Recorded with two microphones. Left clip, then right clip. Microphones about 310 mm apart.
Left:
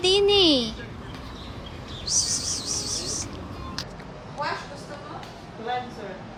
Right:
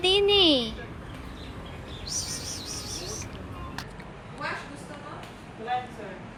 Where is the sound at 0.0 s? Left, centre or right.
Centre.